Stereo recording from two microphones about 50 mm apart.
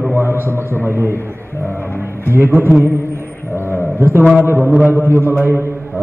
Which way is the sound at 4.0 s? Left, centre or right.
Right.